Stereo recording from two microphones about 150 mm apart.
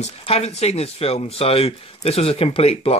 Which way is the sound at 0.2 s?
45° left (ahead or behind).